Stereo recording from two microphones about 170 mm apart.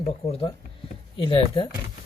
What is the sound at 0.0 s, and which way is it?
Speech, 35° left (ahead or behind).